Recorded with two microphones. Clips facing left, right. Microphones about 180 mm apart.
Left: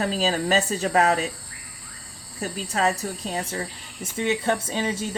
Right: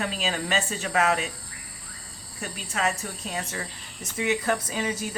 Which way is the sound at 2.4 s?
35° left (ahead or behind).